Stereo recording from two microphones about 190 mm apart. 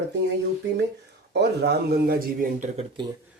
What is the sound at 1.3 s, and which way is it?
Speech, 60° right (ahead or behind).